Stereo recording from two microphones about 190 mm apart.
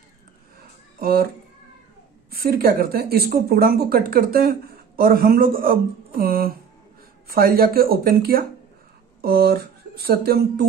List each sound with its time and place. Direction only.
0.9 s a child's voice: 50° right (ahead or behind)
2.3 s speech: 55° right (ahead or behind)